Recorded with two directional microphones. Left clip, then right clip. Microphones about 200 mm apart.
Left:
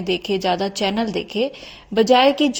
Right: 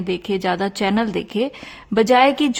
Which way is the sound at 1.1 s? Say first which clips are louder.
Even; 70° right (ahead or behind).